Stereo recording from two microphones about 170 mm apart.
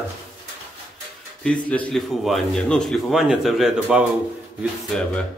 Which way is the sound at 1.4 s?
5° left (ahead or behind).